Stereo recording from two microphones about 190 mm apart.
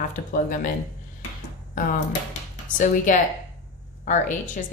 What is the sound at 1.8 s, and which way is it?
A woman's voice, 45° left (ahead or behind).